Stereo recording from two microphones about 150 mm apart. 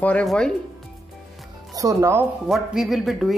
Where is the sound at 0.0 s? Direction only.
5° left (ahead or behind).